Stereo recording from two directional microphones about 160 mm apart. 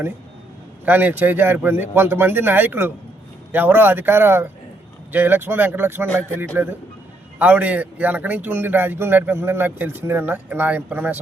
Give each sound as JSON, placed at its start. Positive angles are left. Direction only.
{"t": 0.9, "sound": "speech", "side_deg": -10}